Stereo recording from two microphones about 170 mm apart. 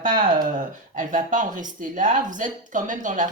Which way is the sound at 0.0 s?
55° right (ahead or behind).